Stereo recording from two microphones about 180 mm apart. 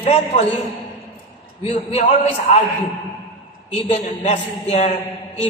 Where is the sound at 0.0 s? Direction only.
35° left (ahead or behind).